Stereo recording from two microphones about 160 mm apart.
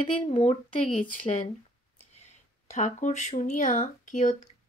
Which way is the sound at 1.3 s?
35° left (ahead or behind).